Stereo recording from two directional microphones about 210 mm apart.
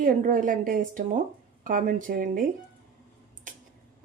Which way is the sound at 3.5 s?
40° right (ahead or behind).